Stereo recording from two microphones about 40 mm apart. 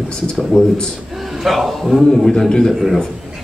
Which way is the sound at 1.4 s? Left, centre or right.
Centre.